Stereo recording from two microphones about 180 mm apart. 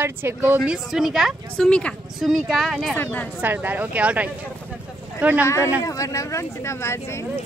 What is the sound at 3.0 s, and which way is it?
Speech, 10° left (ahead or behind).